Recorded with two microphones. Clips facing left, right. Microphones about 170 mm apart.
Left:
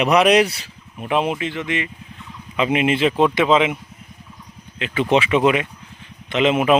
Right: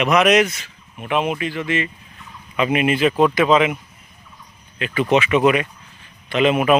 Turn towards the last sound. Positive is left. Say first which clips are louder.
# even
turn(degrees=20)  # may be behind; listen again after turning